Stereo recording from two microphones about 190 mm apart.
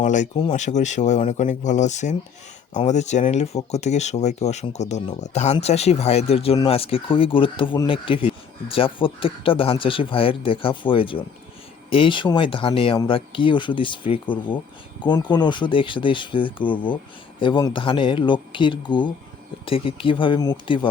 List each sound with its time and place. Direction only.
0.0 s speech: 40° left (ahead or behind); by 20.8 s 25° left (ahead or behind)